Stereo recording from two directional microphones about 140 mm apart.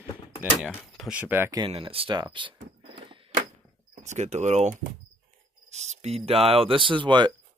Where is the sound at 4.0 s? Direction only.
55° right (ahead or behind); by 7.3 s 35° right (ahead or behind).